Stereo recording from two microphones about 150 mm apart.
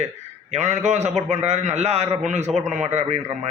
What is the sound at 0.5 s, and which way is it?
Speech, 50° right (ahead or behind).